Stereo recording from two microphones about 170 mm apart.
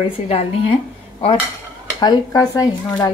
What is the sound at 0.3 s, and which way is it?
Speech, 35° left (ahead or behind).